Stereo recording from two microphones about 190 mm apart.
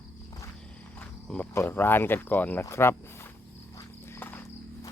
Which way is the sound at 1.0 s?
5° left (ahead or behind).